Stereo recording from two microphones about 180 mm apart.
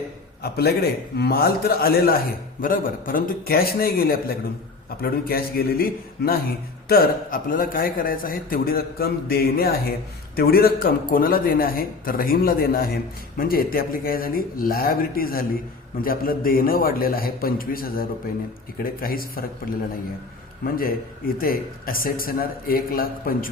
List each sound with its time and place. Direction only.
0.4 s a man's voice: 60° left (ahead or behind)
20.7 s a man's voice: 55° left (ahead or behind)